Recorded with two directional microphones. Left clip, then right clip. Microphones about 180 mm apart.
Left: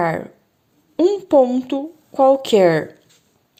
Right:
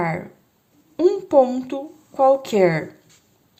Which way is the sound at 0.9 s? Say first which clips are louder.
Left 2 dB; 25° left (ahead or behind).